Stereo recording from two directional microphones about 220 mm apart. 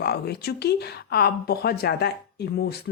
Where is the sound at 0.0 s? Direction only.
45° left (ahead or behind).